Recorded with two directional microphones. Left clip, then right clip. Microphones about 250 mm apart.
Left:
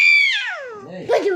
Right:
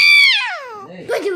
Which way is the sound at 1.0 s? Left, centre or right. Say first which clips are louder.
Left 2 dB; right.